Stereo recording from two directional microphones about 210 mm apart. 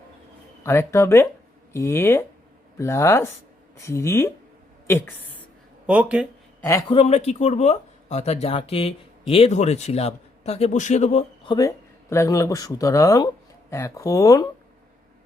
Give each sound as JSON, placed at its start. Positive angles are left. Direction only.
{"t": 0.6, "sound": "speech", "side_deg": 10}
{"t": 5.8, "sound": "speech", "side_deg": -5}
{"t": 6.6, "sound": "speech", "side_deg": 15}
{"t": 6.9, "sound": "speech", "side_deg": 30}
{"t": 11.5, "sound": "speech", "side_deg": 15}